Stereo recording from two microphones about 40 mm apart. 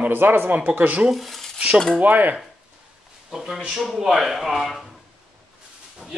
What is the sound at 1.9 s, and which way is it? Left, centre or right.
Speech, right.